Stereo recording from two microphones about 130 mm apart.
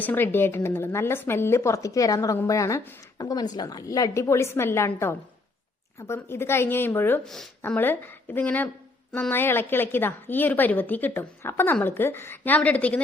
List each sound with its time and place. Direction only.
0.0 s a woman's voice: 15° left (ahead or behind)